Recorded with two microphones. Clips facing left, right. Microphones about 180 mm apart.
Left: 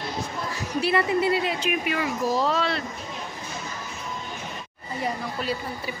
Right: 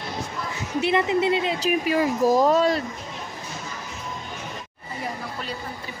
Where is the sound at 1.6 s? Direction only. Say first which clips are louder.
Right 5 dB; 35° right (ahead or behind).